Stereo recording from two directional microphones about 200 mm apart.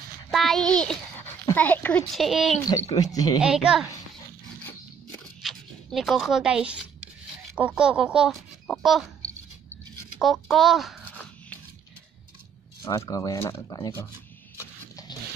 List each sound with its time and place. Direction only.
0.3 s a sound: centre (ahead or behind)
1.4 s a child's voice: 10° left (ahead or behind)
2.6 s a child's voice: 15° left (ahead or behind)
3.3 s speech: 5° right (ahead or behind)
5.4 s speech: centre (ahead or behind)
10.1 s a sound: centre (ahead or behind)
12.8 s a child's voice: 15° left (ahead or behind)